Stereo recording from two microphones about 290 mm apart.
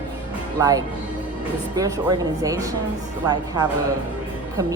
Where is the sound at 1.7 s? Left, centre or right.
Centre.